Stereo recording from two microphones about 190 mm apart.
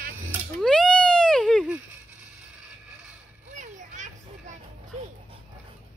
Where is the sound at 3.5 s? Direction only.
40° right (ahead or behind).